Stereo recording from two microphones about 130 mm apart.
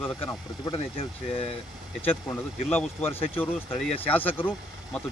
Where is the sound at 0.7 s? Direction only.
45° left (ahead or behind).